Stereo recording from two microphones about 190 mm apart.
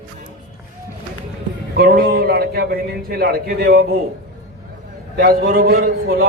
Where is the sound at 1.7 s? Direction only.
50° right (ahead or behind).